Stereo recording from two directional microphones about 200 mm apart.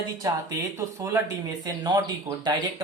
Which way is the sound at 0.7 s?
15° right (ahead or behind).